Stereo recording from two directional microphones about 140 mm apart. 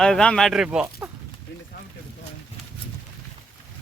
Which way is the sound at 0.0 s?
5° left (ahead or behind).